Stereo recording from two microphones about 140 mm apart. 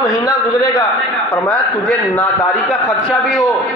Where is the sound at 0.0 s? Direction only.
25° left (ahead or behind).